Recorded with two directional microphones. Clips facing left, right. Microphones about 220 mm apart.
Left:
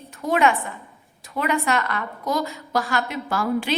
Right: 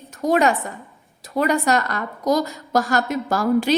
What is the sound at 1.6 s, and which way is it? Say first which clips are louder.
A woman's voice: right 3 dB; 40° right (ahead or behind).